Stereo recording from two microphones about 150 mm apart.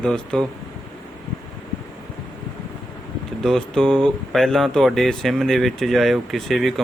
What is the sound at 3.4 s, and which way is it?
Speech, 5° left (ahead or behind).